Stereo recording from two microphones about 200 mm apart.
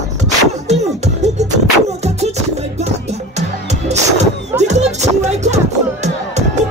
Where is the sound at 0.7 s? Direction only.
35° right (ahead or behind).